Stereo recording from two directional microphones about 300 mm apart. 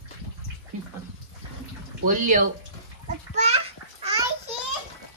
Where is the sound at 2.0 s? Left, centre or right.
Right.